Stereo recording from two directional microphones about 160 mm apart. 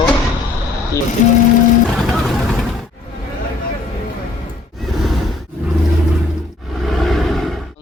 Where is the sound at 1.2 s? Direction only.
50° left (ahead or behind).